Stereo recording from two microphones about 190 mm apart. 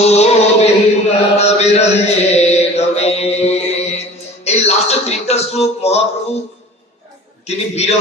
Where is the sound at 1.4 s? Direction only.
35° left (ahead or behind).